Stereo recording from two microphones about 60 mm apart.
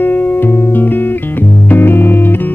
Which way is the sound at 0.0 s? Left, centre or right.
Left.